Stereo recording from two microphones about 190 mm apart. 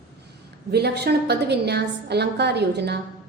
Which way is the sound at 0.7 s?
60° right (ahead or behind).